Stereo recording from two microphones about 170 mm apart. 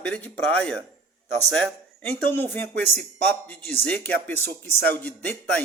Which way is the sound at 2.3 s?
10° left (ahead or behind).